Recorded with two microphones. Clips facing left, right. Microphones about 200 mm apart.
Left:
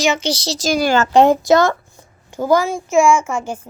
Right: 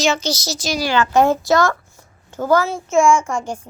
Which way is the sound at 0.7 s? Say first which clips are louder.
Left 3 dB; 50° left (ahead or behind).